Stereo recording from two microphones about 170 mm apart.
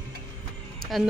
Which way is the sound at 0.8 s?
Centre (ahead or behind).